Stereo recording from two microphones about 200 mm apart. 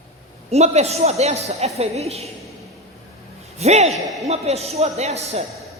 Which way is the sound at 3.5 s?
30° right (ahead or behind).